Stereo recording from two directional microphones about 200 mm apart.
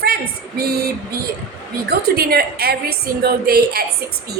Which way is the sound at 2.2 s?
50° right (ahead or behind).